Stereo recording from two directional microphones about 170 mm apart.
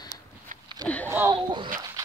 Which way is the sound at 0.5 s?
50° right (ahead or behind).